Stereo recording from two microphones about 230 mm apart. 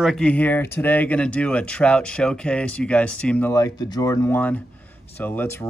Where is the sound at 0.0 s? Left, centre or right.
Centre.